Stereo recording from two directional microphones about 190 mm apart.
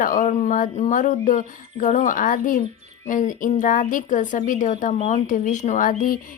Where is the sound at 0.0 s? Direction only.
45° left (ahead or behind).